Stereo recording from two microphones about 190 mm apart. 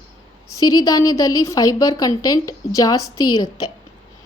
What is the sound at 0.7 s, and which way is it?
A woman's voice, 20° left (ahead or behind).